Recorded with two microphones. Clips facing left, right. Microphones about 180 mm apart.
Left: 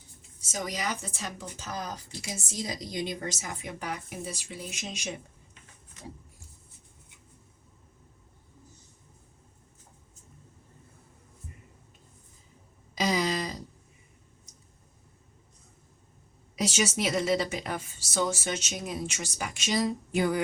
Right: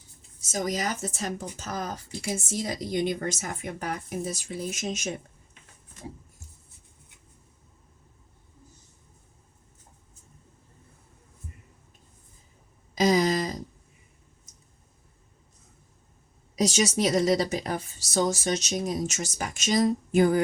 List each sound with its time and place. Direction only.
0.2 s speech: 40° right (ahead or behind)
13.0 s a sound: 45° right (ahead or behind)
16.6 s a woman's voice: 35° right (ahead or behind)